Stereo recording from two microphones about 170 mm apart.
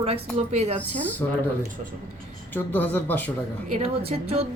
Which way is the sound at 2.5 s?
10° left (ahead or behind).